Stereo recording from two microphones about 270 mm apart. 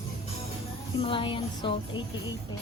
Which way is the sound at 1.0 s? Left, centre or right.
Centre.